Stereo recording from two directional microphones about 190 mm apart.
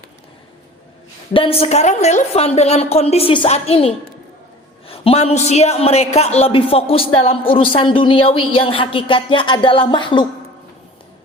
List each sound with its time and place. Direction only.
1.3 s a woman's voice: 30° left (ahead or behind)